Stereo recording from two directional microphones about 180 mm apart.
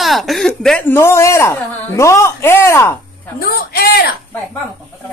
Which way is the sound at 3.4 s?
60° left (ahead or behind).